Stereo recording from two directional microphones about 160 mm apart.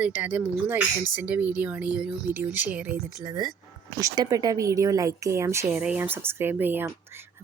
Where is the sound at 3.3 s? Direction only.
25° right (ahead or behind).